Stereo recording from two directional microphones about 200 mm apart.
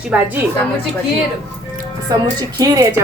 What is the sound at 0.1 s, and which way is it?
Speech, 10° right (ahead or behind).